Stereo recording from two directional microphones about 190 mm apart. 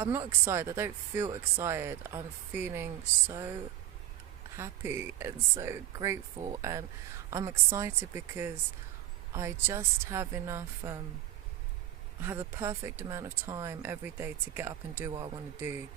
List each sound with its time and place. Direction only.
0.0 s speech: 10° right (ahead or behind)
12.2 s speech: 15° right (ahead or behind)